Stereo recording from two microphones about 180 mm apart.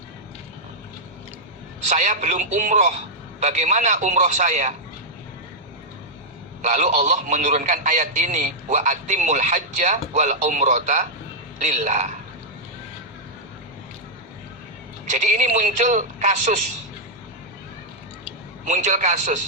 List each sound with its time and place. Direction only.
1.9 s a man's voice: 40° right (ahead or behind)
6.6 s a man's voice: 40° right (ahead or behind)
15.1 s a man's voice: 45° right (ahead or behind)
18.6 s a man's voice: 45° right (ahead or behind)